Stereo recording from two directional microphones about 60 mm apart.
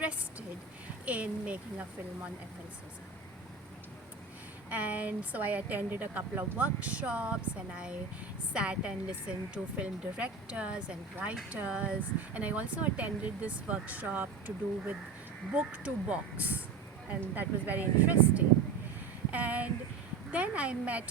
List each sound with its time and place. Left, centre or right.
1.0 s speech: right
4.7 s speech: right
8.5 s speech: centre